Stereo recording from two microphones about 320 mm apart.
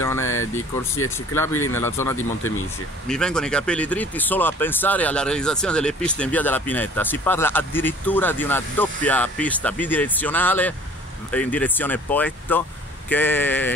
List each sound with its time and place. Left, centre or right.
0.0 s speech: centre